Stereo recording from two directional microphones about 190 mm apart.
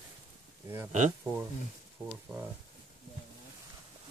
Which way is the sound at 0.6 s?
15° right (ahead or behind).